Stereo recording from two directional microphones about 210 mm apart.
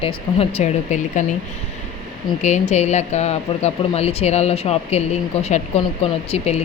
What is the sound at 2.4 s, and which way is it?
Speech, 35° left (ahead or behind).